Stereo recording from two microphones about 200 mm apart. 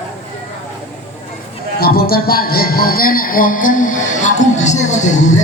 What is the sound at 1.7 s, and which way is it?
A man's voice, 50° left (ahead or behind).